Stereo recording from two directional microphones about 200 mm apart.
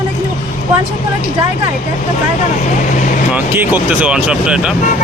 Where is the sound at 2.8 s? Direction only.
40° left (ahead or behind).